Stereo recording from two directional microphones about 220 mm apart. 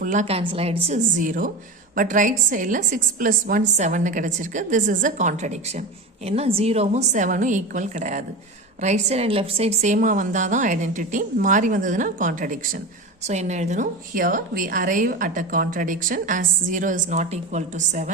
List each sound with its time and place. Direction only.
0.0 s a woman's voice: 35° right (ahead or behind)